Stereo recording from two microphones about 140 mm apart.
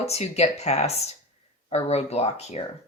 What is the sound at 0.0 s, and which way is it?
Speech, 50° left (ahead or behind).